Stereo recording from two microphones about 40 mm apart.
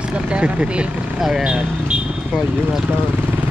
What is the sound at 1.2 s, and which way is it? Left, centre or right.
Speech, centre.